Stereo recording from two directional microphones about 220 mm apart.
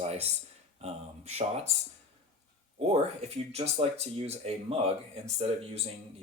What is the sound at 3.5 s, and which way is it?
Speech, 30° right (ahead or behind).